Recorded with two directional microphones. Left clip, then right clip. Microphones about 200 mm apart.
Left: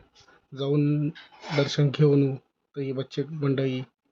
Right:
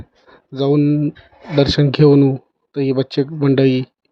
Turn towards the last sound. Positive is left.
turn(degrees=-40)  # may be behind; listen again after turning